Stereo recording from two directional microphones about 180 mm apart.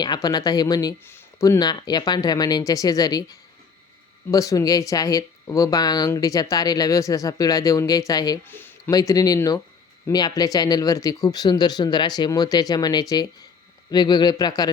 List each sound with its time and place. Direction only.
0.0 s speech: 20° left (ahead or behind)